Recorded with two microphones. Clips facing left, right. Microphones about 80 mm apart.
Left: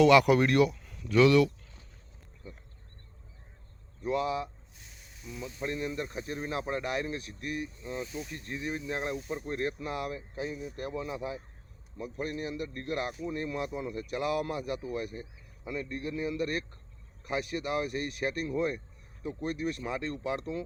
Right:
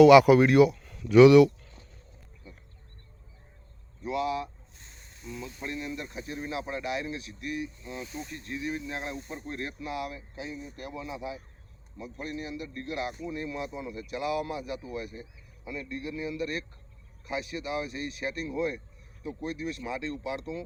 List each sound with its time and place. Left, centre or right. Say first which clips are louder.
0.0 s speech: right 5 dB; centre
4.0 s speech: even; left
5.3 s speech: even; centre
5.6 s speech: left 3 dB; left
9.1 s speech: left 3 dB; centre
9.5 s a man's voice: left 2 dB; left